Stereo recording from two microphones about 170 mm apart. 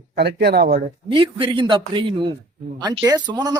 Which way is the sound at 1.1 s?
30° right (ahead or behind).